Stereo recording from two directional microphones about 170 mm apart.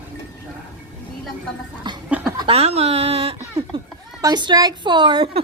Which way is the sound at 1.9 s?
25° right (ahead or behind).